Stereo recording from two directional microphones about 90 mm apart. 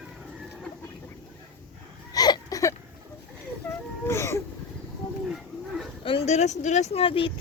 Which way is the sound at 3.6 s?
20° left (ahead or behind).